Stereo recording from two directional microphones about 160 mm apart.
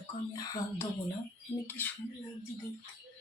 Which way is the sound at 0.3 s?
20° left (ahead or behind).